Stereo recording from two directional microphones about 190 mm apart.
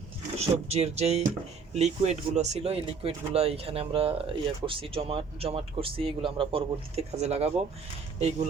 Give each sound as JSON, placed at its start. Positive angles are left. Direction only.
{"t": 0.3, "sound": "speech", "side_deg": -35}